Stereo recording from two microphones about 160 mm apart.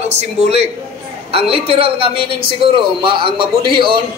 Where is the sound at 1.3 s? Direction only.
35° right (ahead or behind).